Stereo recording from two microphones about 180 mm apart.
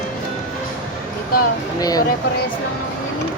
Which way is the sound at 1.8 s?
20° left (ahead or behind).